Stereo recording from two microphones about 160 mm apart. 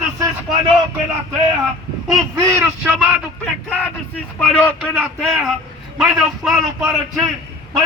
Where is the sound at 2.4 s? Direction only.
20° right (ahead or behind).